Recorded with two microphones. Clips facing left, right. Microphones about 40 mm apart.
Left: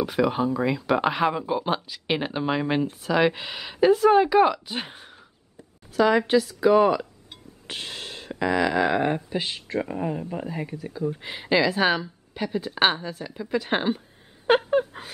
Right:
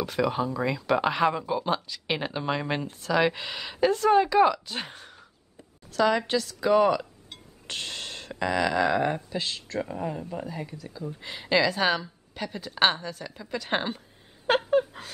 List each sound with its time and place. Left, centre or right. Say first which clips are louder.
0.0 s speech: left 3 dB; centre
0.7 s speech: left 2 dB; centre; by 11.2 s left
11.2 s speech: left 1 dB; centre
14.5 s a sound: left 3 dB; centre